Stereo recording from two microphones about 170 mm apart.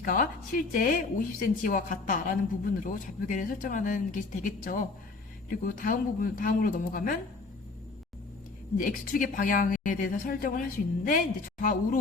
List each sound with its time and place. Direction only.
0.0 s a woman's voice: 55° left (ahead or behind)
8.8 s a woman's voice: 55° left (ahead or behind)